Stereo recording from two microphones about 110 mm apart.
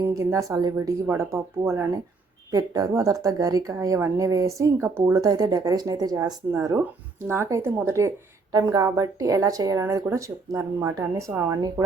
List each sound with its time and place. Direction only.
0.1 s speech: 25° right (ahead or behind)
2.5 s speech: 35° right (ahead or behind)